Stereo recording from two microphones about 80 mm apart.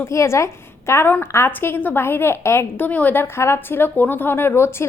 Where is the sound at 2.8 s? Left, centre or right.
Left.